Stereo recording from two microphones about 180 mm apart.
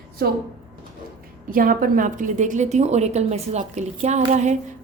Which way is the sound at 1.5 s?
50° right (ahead or behind).